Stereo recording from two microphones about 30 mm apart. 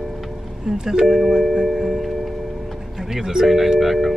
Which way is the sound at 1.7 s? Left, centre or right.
Centre.